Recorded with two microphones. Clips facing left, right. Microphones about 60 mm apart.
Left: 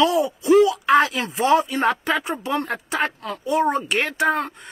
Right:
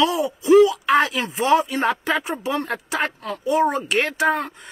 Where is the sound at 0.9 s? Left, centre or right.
Left.